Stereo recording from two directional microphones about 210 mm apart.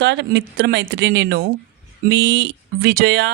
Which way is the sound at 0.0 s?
55° right (ahead or behind).